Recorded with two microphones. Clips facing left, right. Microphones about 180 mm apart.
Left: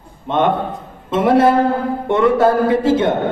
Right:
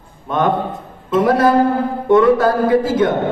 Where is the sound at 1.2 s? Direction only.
25° left (ahead or behind).